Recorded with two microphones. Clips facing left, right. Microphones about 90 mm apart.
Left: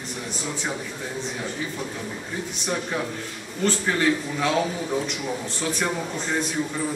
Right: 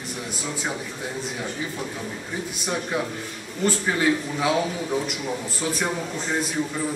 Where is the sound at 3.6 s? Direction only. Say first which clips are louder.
Even; 10° right (ahead or behind).